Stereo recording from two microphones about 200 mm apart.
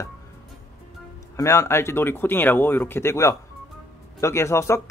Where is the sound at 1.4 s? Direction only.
15° left (ahead or behind).